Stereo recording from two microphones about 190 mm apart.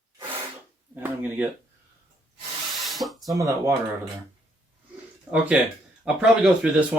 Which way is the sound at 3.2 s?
20° right (ahead or behind).